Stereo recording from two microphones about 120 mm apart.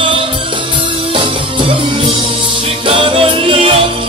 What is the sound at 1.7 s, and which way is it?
Music, 50° right (ahead or behind).